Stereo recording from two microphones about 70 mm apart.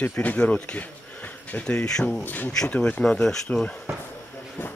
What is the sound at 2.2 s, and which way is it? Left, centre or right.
Speech, left.